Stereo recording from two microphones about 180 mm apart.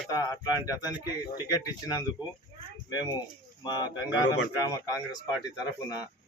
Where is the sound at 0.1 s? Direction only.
20° left (ahead or behind).